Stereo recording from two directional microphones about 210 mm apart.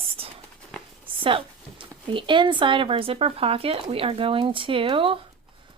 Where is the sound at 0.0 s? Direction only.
25° right (ahead or behind).